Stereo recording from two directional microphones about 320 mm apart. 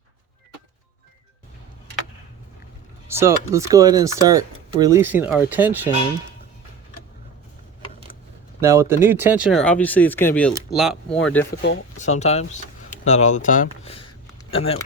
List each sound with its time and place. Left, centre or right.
3.1 s speech: centre
8.6 s speech: centre
11.9 s speech: left